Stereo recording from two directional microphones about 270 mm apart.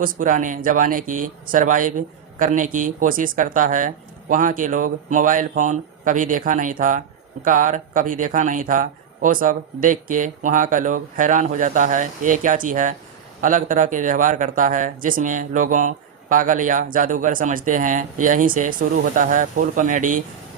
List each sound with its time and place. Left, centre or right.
0.0 s speech: right